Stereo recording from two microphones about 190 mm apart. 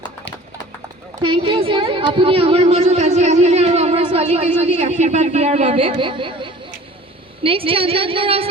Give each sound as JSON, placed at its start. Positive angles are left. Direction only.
{"t": 1.2, "sound": "a woman's voice", "side_deg": -25}